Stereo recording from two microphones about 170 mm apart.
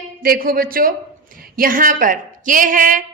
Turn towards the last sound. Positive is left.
turn(degrees=-50)  # may be behind; listen again after turning